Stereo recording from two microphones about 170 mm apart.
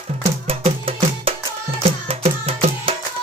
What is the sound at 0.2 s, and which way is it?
Music, 40° right (ahead or behind).